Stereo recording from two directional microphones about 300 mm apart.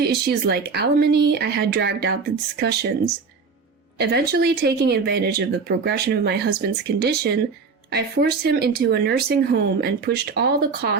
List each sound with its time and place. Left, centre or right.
0.0 s speech: right
3.9 s speech: right